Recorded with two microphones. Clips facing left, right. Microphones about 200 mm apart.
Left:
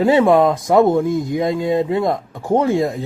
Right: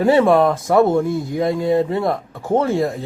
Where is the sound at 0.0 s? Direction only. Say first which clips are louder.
Left 1 dB; 20° left (ahead or behind).